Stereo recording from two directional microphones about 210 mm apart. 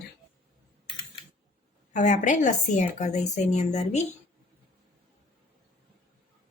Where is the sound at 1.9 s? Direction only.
35° left (ahead or behind).